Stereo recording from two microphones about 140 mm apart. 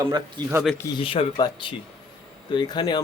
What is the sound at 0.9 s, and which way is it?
Speech, 40° left (ahead or behind).